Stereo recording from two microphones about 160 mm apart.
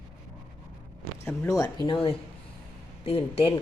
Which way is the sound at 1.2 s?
20° left (ahead or behind).